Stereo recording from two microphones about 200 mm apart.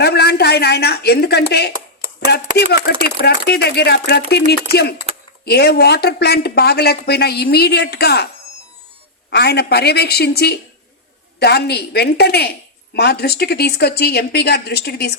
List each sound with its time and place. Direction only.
0.0 s speech: 55° left (ahead or behind)
9.3 s speech: 55° left (ahead or behind)